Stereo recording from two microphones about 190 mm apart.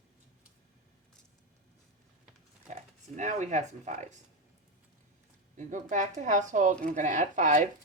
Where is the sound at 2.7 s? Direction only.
40° right (ahead or behind).